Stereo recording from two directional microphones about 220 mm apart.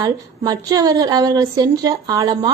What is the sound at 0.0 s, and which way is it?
A woman's voice, 15° right (ahead or behind).